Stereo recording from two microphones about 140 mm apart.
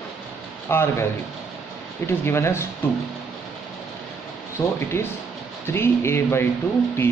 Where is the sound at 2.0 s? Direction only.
20° left (ahead or behind).